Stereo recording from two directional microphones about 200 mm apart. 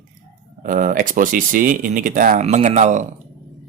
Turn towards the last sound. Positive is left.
turn(degrees=-35)  # may be behind; listen again after turning